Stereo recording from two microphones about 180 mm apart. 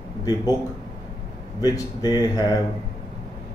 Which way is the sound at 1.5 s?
20° left (ahead or behind).